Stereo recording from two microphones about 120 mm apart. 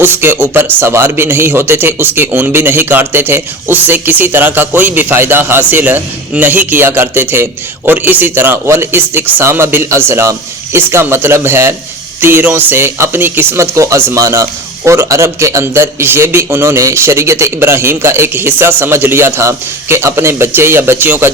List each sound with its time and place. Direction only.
0.0 s a man's voice: 20° right (ahead or behind)